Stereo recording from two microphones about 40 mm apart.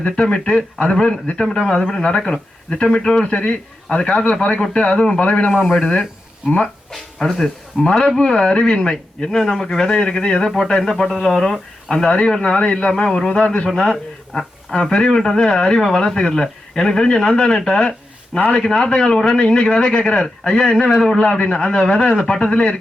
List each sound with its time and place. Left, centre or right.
0.0 s a man's voice: left
5.5 s speech: centre
6.9 s speech: centre
12.0 s speech: left
13.7 s speech: centre
20.2 s speech: centre; by 22.7 s left